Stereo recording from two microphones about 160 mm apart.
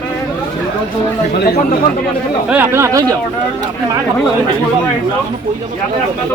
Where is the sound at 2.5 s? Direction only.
15° right (ahead or behind).